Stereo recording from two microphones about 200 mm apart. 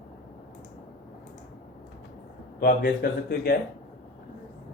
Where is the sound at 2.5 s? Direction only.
50° left (ahead or behind).